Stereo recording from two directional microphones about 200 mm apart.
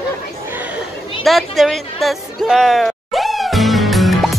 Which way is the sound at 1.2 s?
Centre (ahead or behind).